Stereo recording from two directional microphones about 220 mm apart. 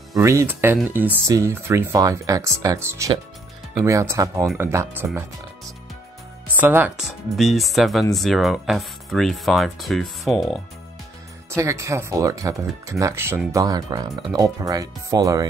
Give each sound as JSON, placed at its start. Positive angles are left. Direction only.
{"t": 0.1, "sound": "speech", "side_deg": -15}
{"t": 6.5, "sound": "speech", "side_deg": -10}
{"t": 11.5, "sound": "speech", "side_deg": -15}